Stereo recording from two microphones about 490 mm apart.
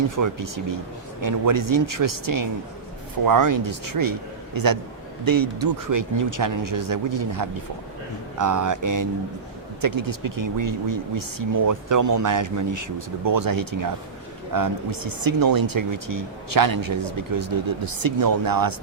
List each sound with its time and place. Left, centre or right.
0.2 s speech: right